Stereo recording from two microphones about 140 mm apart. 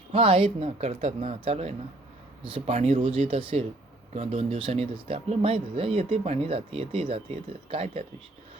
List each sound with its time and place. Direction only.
0.1 s speech: 40° right (ahead or behind)